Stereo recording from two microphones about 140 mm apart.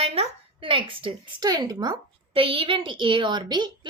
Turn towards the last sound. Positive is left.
turn(degrees=-30)  # may be behind; listen again after turning